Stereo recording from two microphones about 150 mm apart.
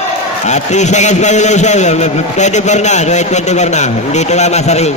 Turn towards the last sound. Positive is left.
turn(degrees=45)  # may be behind; listen again after turning